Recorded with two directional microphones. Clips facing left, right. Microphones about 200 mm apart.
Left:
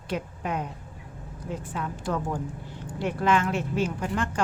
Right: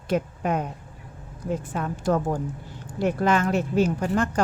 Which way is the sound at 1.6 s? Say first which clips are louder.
Right 6 dB; 45° right (ahead or behind).